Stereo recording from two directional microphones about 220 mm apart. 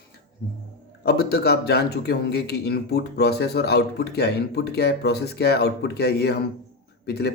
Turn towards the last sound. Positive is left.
turn(degrees=50)  # may be behind; listen again after turning